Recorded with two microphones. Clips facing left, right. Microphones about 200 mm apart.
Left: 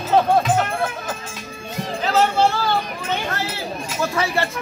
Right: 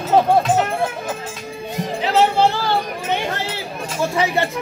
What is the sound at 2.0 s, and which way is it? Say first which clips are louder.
Music: right 2 dB; 15° right (ahead or behind).